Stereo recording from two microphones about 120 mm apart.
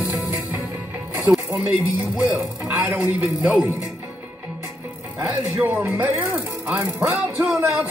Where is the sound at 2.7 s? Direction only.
15° right (ahead or behind).